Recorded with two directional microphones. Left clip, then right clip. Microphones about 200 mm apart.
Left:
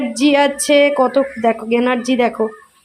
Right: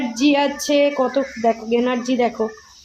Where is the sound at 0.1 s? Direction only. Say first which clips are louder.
Left 4 dB; 25° left (ahead or behind).